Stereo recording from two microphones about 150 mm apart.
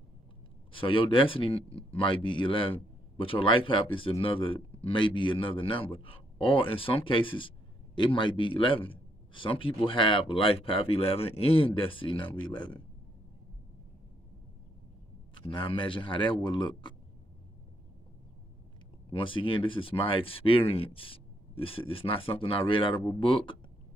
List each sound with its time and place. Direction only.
0.7 s a man's voice: 35° left (ahead or behind)
15.3 s a man's voice: 35° left (ahead or behind)
19.1 s a man's voice: 35° left (ahead or behind)